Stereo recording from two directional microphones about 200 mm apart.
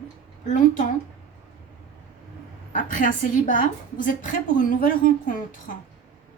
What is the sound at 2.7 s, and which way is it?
A woman's voice, 40° left (ahead or behind).